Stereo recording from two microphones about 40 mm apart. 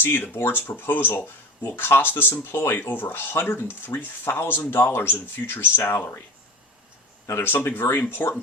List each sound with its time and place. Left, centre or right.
0.3 s speech: left
7.3 s speech: left